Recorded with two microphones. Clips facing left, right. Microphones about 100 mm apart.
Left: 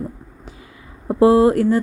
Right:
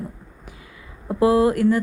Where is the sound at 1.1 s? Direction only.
30° left (ahead or behind).